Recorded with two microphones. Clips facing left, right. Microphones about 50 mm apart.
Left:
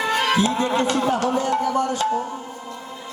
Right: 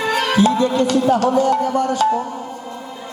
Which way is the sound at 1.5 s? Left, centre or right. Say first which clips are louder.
Right 4 dB; right.